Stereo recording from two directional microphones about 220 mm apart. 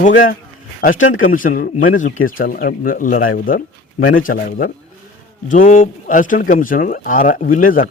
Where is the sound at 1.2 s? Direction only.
35° left (ahead or behind).